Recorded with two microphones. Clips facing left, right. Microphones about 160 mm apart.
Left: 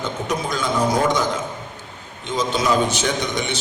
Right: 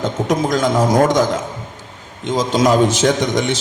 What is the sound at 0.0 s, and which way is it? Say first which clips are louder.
A man's voice: right 7 dB; 90° right.